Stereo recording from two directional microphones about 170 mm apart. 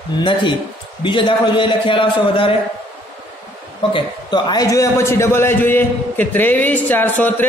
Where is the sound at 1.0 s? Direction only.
30° left (ahead or behind).